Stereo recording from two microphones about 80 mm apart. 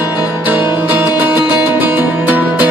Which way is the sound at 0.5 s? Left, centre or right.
Right.